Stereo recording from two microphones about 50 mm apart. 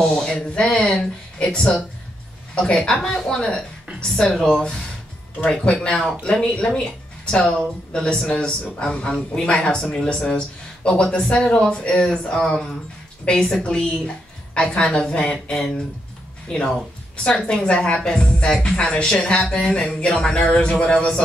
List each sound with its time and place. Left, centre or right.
0.0 s speech: centre
6.4 s speech: left